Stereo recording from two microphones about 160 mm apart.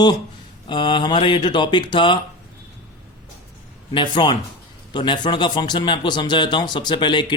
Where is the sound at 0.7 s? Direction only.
30° left (ahead or behind).